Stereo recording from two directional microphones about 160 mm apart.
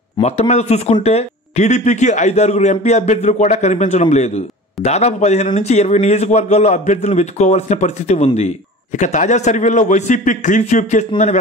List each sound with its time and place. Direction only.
0.2 s a man's voice: 45° left (ahead or behind)